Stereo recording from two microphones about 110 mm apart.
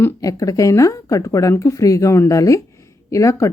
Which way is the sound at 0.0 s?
30° left (ahead or behind).